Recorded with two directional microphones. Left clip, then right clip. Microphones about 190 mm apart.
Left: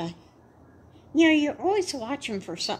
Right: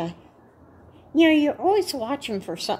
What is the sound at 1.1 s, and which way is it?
A woman's voice, 5° right (ahead or behind).